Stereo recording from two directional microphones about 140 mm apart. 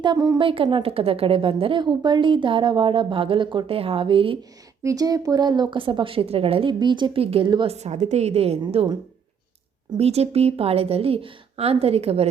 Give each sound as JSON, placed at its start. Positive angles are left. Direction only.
{"t": 0.0, "sound": "a woman's voice", "side_deg": -25}
{"t": 0.3, "sound": "a woman's voice", "side_deg": -40}
{"t": 4.8, "sound": "a woman's voice", "side_deg": -25}
{"t": 7.7, "sound": "a woman's voice", "side_deg": -50}
{"t": 10.0, "sound": "a woman's voice", "side_deg": -45}